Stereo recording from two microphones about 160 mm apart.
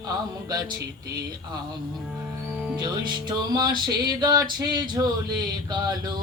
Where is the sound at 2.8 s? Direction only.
25° right (ahead or behind).